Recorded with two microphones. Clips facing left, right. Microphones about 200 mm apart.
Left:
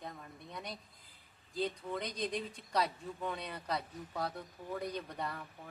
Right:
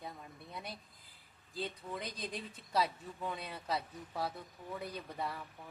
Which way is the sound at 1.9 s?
5° right (ahead or behind).